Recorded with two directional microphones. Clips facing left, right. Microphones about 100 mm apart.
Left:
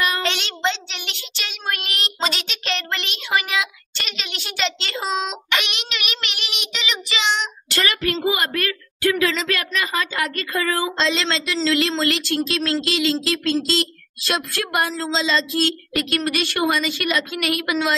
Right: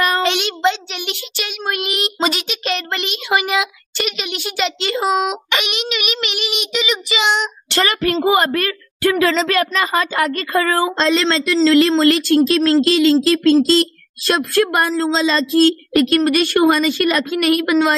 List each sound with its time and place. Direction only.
0.2 s child singing: 10° right (ahead or behind)
7.7 s speech: 30° right (ahead or behind)